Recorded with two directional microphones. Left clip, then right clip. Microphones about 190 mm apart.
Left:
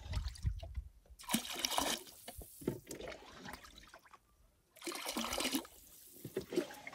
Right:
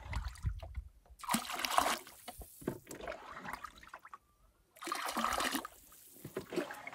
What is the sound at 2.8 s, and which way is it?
Rowboat, 45° right (ahead or behind).